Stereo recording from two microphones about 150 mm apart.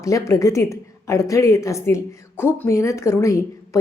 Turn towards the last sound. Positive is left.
turn(degrees=20)  # may be behind; listen again after turning